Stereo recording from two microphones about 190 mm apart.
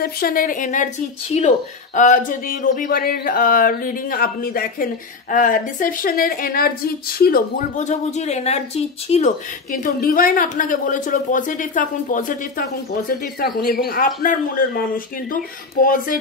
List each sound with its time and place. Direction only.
0.0 s a woman's voice: 50° left (ahead or behind)